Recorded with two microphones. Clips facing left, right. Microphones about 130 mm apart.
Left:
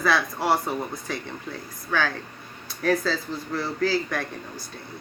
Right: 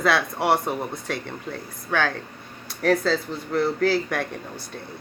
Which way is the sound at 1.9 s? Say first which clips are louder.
Right 2 dB; 55° right (ahead or behind).